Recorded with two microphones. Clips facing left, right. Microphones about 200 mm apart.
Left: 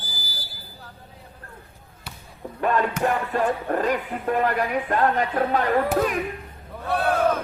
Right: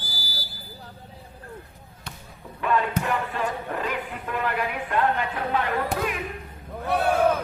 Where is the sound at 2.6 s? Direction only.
40° left (ahead or behind).